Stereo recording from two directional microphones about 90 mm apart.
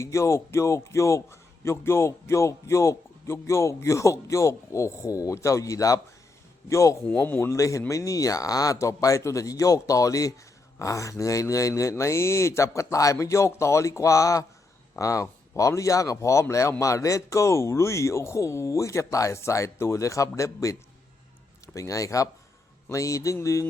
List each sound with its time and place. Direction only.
0.0 s a man's voice: 35° left (ahead or behind)
7.5 s a man's voice: 35° left (ahead or behind)
21.8 s a man's voice: 40° left (ahead or behind)